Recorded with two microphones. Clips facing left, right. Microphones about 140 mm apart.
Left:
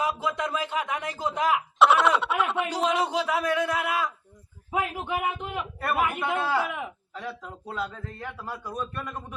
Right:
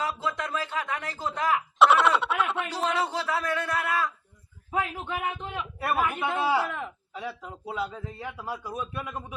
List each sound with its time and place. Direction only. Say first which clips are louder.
0.0 s speech: left 3 dB; 15° left (ahead or behind)
1.8 s a sound: even; centre (ahead or behind)
2.6 s speech: left 3 dB; 15° left (ahead or behind)
7.1 s a man's voice: even; 10° right (ahead or behind)